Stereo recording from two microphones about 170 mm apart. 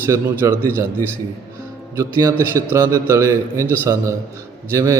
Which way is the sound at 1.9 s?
15° right (ahead or behind).